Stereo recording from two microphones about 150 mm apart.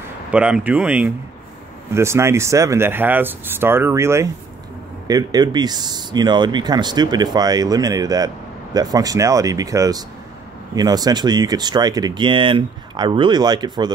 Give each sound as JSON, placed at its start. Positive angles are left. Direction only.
{"t": 0.3, "sound": "speech", "side_deg": -10}